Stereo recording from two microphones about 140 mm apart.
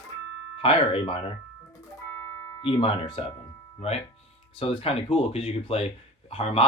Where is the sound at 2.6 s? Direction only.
40° left (ahead or behind).